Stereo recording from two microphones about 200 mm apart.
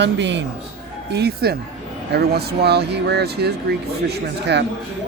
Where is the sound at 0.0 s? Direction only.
60° right (ahead or behind).